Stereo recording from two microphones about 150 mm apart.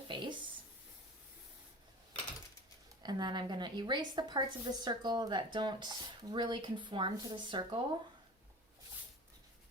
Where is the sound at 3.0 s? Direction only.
30° right (ahead or behind).